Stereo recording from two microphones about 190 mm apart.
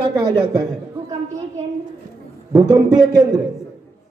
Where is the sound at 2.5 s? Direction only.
20° right (ahead or behind).